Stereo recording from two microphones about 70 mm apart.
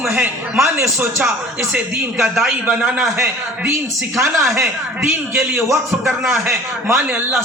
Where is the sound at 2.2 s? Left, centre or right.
Centre.